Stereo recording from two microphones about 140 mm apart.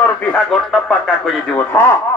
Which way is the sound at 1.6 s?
15° left (ahead or behind).